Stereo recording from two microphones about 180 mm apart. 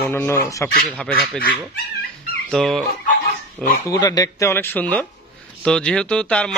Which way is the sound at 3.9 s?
20° left (ahead or behind).